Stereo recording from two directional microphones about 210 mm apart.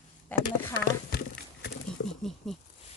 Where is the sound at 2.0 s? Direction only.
60° left (ahead or behind).